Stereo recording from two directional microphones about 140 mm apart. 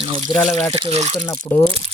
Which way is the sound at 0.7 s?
45° right (ahead or behind).